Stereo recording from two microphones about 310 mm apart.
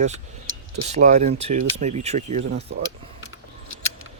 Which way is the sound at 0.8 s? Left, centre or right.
Right.